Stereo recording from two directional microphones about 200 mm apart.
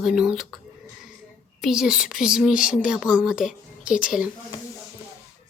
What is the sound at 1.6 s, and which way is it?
Speech, centre (ahead or behind).